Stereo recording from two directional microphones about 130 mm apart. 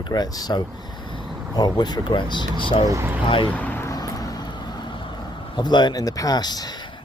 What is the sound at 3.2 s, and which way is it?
Speech, 40° left (ahead or behind).